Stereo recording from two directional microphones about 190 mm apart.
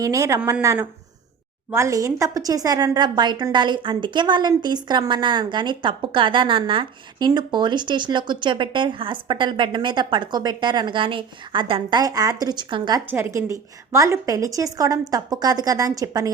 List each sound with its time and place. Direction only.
0.0 s a woman's voice: 15° right (ahead or behind)
13.1 s a woman's voice: 10° right (ahead or behind)